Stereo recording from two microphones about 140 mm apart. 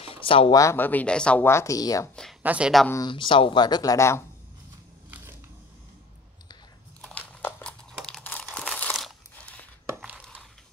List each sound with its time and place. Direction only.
0.0 s a sound: 40° left (ahead or behind)
0.6 s speech: 15° left (ahead or behind)
2.4 s speech: 10° right (ahead or behind)
3.1 s speech: 35° left (ahead or behind)
7.0 s crumpling: 10° left (ahead or behind)
8.9 s crunch: centre (ahead or behind)